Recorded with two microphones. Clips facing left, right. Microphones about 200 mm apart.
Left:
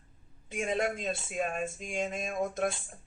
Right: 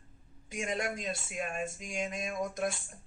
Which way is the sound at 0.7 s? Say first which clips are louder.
Left 4 dB; 25° left (ahead or behind).